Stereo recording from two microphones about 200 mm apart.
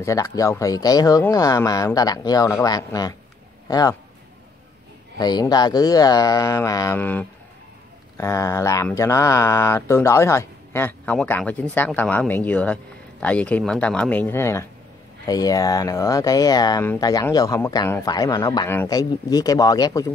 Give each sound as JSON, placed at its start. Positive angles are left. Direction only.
{"t": 0.0, "sound": "speech", "side_deg": 15}
{"t": 5.2, "sound": "speech", "side_deg": 20}